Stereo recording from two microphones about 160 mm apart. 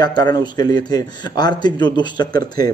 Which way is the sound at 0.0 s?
25° left (ahead or behind).